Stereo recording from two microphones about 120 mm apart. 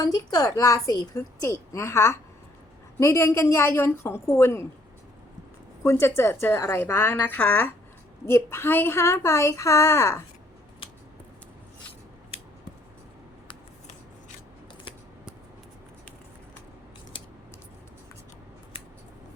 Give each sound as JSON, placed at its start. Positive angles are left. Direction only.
{"t": 0.0, "sound": "a woman's voice", "side_deg": 35}
{"t": 5.8, "sound": "a woman's voice", "side_deg": 20}